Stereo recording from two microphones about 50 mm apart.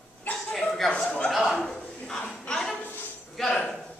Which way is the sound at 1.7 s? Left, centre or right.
Centre.